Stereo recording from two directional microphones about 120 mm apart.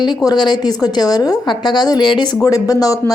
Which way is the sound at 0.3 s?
35° left (ahead or behind).